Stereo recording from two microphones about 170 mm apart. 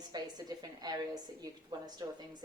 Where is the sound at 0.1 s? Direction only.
25° right (ahead or behind).